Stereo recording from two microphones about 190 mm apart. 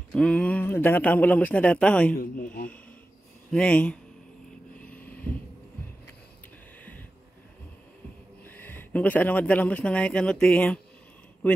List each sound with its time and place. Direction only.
0.1 s a man's voice: 5° left (ahead or behind)
2.1 s speech: 45° left (ahead or behind)
3.5 s speech: 5° left (ahead or behind)
4.8 s a sound: 10° left (ahead or behind)
6.8 s a sound: 10° left (ahead or behind)
8.5 s speech: 10° left (ahead or behind)